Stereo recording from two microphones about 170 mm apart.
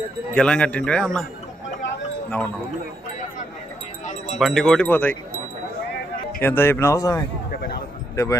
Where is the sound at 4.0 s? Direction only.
50° left (ahead or behind).